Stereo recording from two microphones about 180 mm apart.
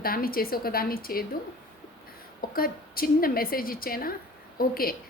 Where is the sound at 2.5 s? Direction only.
55° left (ahead or behind).